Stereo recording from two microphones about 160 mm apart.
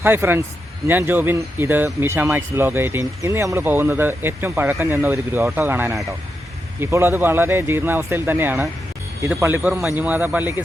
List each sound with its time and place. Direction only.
0.0 s speech: 15° right (ahead or behind)